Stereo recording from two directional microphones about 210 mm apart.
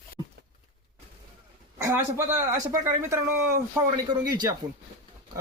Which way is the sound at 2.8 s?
10° right (ahead or behind).